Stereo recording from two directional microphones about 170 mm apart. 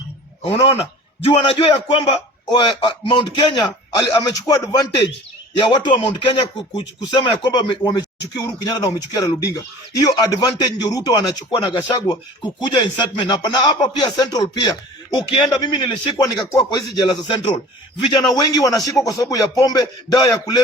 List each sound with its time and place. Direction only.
1.3 s speech: 30° left (ahead or behind)